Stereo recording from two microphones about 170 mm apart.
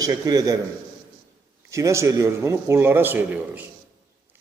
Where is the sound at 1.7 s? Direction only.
20° right (ahead or behind).